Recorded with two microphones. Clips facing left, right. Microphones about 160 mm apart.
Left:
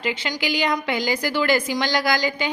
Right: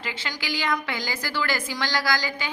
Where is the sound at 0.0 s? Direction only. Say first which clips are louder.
Left 8 dB; 15° left (ahead or behind).